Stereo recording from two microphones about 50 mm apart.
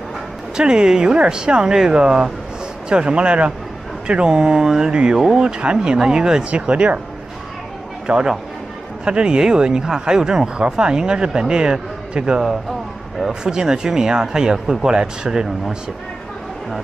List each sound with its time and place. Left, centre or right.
0.6 s speech: centre
6.5 s speech: right
8.1 s speech: right